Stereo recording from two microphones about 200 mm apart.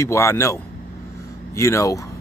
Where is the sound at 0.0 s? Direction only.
15° left (ahead or behind).